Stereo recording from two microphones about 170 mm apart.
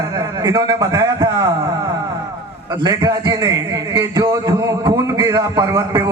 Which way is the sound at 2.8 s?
20° right (ahead or behind).